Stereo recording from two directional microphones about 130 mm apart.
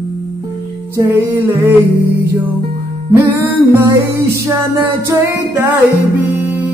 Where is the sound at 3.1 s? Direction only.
20° right (ahead or behind).